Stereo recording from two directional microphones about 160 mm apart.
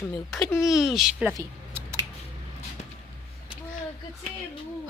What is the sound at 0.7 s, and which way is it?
Speech, centre (ahead or behind).